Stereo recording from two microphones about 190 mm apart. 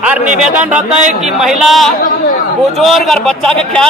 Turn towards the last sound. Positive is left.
turn(degrees=5)  # may be behind; listen again after turning